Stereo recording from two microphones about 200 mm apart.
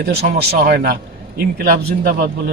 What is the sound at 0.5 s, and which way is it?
A man's voice, 45° right (ahead or behind).